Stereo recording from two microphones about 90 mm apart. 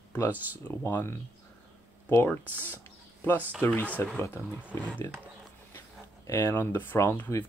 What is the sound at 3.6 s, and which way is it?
Speech, 30° left (ahead or behind).